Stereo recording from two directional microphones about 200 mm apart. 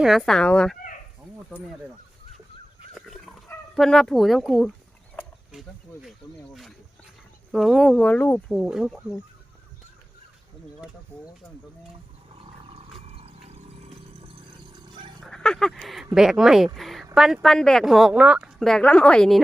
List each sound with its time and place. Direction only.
0.0 s a woman's voice: centre (ahead or behind)
2.9 s dog: centre (ahead or behind)
3.5 s speech: 5° left (ahead or behind)
6.0 s snake: centre (ahead or behind)
7.5 s a woman's voice: centre (ahead or behind)
13.1 s a sound: 30° right (ahead or behind)
15.2 s a woman's voice: 5° left (ahead or behind)